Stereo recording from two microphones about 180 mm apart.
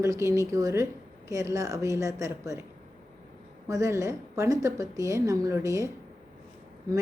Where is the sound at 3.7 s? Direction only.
15° right (ahead or behind).